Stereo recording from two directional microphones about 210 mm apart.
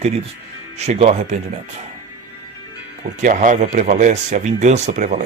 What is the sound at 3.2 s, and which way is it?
Speech, 40° right (ahead or behind).